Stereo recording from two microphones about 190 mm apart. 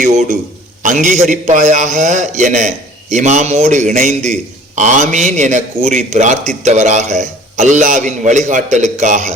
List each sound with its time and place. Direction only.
0.0 s a man's voice: 40° right (ahead or behind)